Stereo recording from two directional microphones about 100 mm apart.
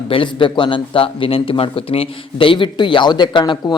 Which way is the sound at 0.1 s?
60° left (ahead or behind).